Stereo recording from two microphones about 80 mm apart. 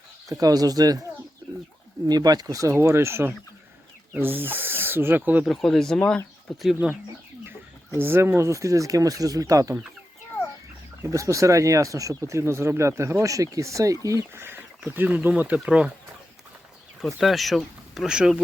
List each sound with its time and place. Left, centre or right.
0.3 s speech: right
2.0 s speech: right
2.7 s speech: right
5.5 s speech: centre
7.9 s speech: right
11.1 s speech: right
14.3 s speech: right; by 15.9 s centre
17.2 s speech: centre